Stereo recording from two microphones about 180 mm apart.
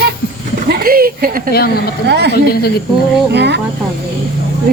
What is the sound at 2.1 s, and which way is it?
Speech, 70° right (ahead or behind).